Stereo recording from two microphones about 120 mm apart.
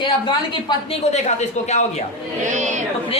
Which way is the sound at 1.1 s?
70° left (ahead or behind).